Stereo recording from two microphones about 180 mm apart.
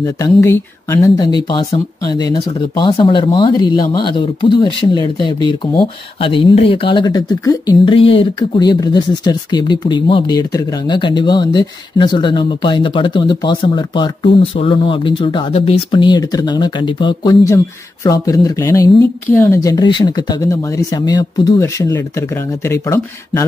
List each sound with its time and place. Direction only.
0.0 s speech: 15° left (ahead or behind)